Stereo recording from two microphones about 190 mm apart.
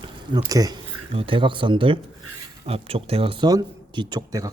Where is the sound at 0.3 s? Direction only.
20° right (ahead or behind).